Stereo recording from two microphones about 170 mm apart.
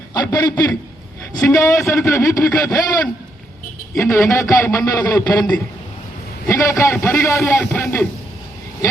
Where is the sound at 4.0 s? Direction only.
15° left (ahead or behind).